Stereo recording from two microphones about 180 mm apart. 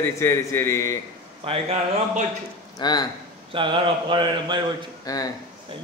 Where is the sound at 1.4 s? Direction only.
35° right (ahead or behind).